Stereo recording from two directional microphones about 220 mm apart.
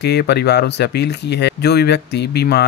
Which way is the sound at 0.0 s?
50° left (ahead or behind).